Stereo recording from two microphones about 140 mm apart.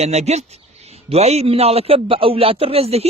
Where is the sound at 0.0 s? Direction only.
50° right (ahead or behind).